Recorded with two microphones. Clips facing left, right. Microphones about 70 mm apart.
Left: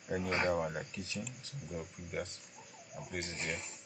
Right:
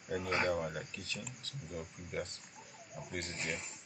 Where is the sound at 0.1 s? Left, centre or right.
Centre.